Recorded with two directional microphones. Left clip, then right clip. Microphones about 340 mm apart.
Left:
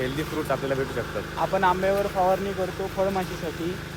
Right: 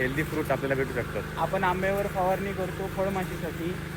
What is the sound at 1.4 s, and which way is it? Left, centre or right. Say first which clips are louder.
Speech: left 4 dB; centre.